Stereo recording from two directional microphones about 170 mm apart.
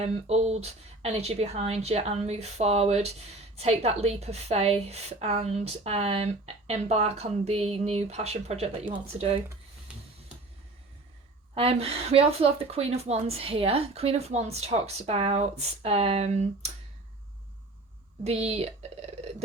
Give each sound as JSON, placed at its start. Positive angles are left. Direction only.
{"t": 0.0, "sound": "a woman's voice", "side_deg": -40}
{"t": 11.5, "sound": "a woman's voice", "side_deg": -35}
{"t": 18.2, "sound": "speech", "side_deg": -35}